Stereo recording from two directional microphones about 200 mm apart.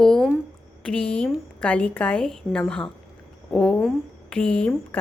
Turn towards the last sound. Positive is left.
turn(degrees=5)  # may be behind; listen again after turning